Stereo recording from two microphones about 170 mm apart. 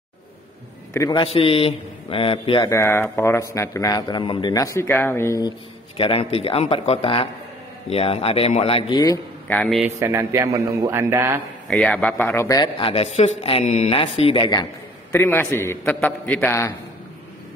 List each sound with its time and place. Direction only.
1.1 s a man's voice: 30° left (ahead or behind)
2.7 s a man's voice: 15° left (ahead or behind)
5.9 s a man's voice: 35° left (ahead or behind)
9.5 s a man's voice: 5° left (ahead or behind)
9.9 s a man's voice: 15° right (ahead or behind)
11.6 s a man's voice: 5° left (ahead or behind); by 14.7 s 25° left (ahead or behind)
15.1 s a man's voice: 15° left (ahead or behind)